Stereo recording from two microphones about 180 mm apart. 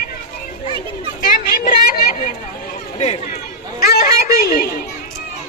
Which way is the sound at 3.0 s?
40° left (ahead or behind).